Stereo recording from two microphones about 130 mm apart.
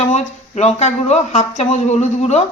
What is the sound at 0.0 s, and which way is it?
A man's voice, 60° left (ahead or behind).